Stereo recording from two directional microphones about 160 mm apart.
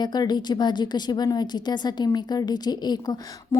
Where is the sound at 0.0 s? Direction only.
25° left (ahead or behind).